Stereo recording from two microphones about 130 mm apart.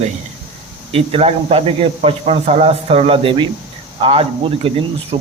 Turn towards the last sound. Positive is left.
turn(degrees=-45)  # may be behind; listen again after turning